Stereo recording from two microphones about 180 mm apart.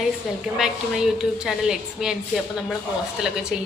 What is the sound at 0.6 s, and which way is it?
A woman's voice, centre (ahead or behind).